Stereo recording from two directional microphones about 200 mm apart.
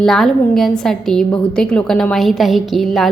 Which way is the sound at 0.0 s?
Centre (ahead or behind).